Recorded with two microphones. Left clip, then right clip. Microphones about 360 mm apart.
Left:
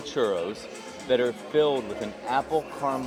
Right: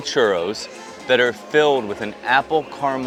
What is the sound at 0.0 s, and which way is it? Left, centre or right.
Speech, right.